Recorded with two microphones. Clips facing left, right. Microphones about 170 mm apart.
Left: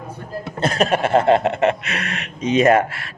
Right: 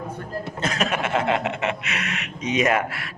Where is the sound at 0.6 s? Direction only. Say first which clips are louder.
Left 7 dB; 35° left (ahead or behind).